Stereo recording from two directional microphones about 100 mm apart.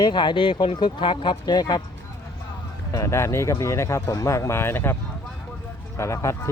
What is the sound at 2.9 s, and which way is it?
Speech, 30° left (ahead or behind).